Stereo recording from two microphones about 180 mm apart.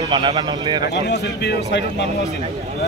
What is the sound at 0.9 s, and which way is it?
Speech, 70° left (ahead or behind).